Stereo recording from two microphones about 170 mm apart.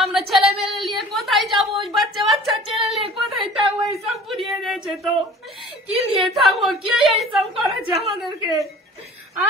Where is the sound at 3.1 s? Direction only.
Centre (ahead or behind).